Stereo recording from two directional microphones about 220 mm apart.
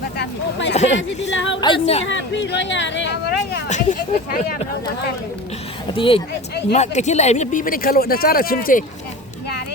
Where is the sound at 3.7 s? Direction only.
35° left (ahead or behind).